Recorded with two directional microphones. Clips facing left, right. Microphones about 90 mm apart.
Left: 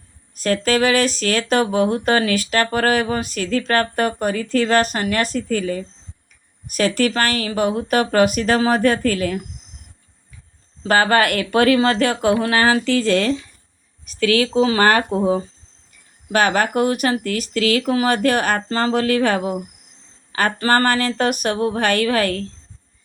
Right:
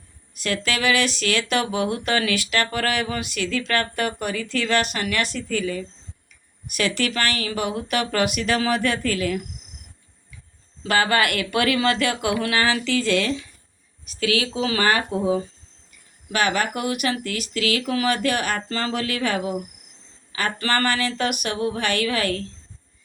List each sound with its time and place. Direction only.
0.3 s speech: 40° left (ahead or behind)
10.8 s speech: 40° left (ahead or behind)